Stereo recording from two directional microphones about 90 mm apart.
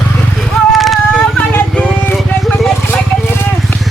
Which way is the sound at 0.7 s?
Centre (ahead or behind).